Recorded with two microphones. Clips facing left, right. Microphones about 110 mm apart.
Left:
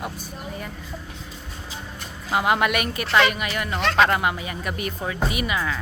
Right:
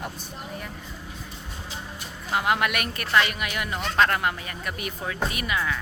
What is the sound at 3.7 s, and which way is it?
Speech, 80° left.